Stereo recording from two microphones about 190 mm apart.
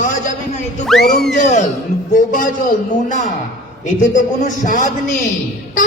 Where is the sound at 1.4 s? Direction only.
40° left (ahead or behind).